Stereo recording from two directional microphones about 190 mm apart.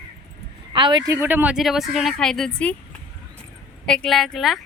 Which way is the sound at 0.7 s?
25° right (ahead or behind).